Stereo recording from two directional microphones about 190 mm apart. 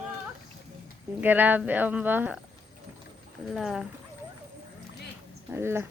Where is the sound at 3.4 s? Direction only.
Centre (ahead or behind).